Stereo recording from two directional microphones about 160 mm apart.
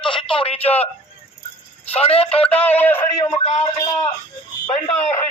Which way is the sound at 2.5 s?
10° left (ahead or behind).